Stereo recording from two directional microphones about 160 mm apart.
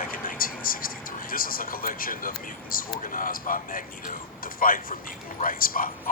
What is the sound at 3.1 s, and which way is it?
Speech, 60° left (ahead or behind).